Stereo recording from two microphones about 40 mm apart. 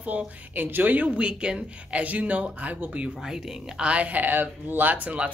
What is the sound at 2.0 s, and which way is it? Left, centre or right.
Speech, right.